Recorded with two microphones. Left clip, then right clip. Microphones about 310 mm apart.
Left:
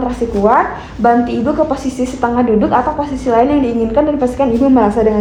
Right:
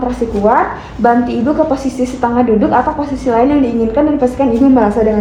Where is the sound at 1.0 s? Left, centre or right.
Centre.